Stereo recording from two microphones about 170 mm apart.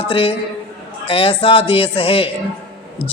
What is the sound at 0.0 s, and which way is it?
A woman's voice, 30° left (ahead or behind).